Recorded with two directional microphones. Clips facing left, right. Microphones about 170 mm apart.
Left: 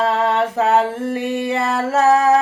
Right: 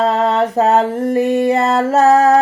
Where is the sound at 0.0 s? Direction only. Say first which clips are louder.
Right 3 dB; 40° right (ahead or behind).